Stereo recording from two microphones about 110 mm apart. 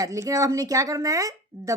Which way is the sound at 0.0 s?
30° right (ahead or behind).